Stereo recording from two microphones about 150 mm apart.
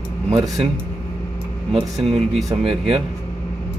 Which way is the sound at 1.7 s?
40° right (ahead or behind).